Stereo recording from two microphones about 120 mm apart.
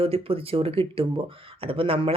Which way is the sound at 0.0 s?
50° right (ahead or behind).